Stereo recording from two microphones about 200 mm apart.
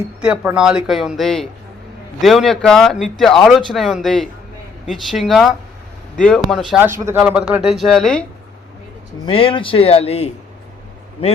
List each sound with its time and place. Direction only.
0.3 s speech: 5° right (ahead or behind)
9.2 s speech: 25° left (ahead or behind)